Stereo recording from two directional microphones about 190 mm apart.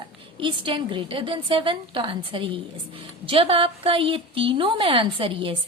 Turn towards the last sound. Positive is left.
turn(degrees=-30)  # may be behind; listen again after turning